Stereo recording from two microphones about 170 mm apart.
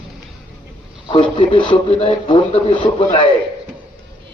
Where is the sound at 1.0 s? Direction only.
30° left (ahead or behind).